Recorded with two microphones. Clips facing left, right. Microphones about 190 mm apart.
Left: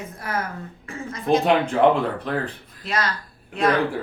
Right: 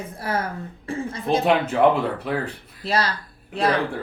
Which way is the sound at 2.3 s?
5° right (ahead or behind).